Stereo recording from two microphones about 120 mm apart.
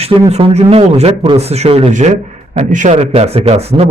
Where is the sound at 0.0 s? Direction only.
60° right (ahead or behind).